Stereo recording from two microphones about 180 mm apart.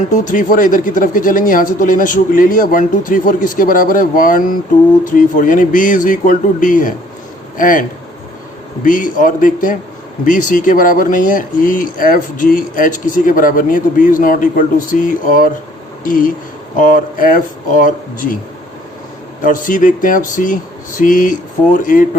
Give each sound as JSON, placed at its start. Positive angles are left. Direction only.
{"t": 0.1, "sound": "speech", "side_deg": 45}
{"t": 16.7, "sound": "speech", "side_deg": 45}
{"t": 19.4, "sound": "speech", "side_deg": 45}